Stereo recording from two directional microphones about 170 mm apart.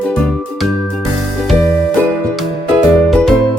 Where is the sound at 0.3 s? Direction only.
5° left (ahead or behind).